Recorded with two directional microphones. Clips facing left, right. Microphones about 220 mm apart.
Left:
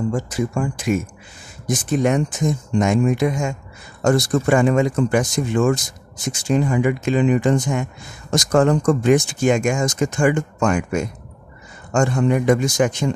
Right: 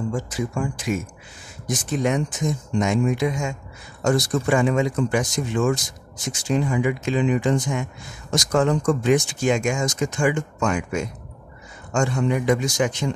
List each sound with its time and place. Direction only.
0.1 s speech: 50° left (ahead or behind)